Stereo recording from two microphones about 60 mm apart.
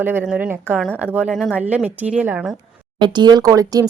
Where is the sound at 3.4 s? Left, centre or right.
Right.